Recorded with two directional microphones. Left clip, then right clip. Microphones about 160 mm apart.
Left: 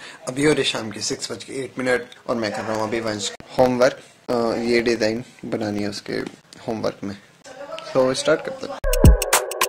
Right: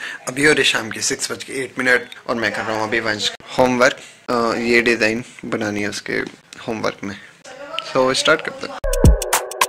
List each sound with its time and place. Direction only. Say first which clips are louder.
0.0 s speech: right 4 dB; 15° left (ahead or behind)
3.5 s speech: right 2 dB; centre (ahead or behind)
7.7 s music: right 3 dB; 5° left (ahead or behind)